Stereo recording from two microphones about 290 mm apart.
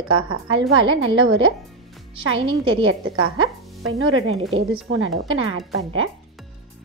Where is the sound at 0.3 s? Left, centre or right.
Right.